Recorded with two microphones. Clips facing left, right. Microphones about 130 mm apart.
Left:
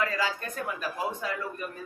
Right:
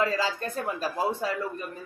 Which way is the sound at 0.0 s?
30° right (ahead or behind).